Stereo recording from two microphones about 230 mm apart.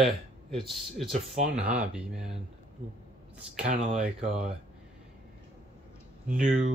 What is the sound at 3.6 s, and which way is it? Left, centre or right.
Speech, right.